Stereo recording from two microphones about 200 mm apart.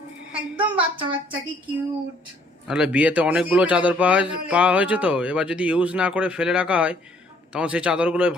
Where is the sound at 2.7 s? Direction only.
5° right (ahead or behind).